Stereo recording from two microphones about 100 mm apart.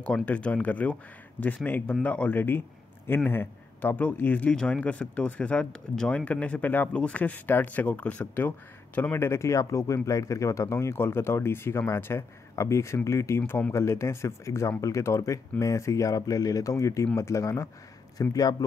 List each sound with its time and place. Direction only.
0.0 s speech: 10° left (ahead or behind); by 18.7 s 40° left (ahead or behind)